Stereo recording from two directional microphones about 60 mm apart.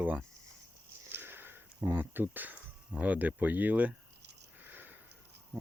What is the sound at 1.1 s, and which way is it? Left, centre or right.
Sniff, right.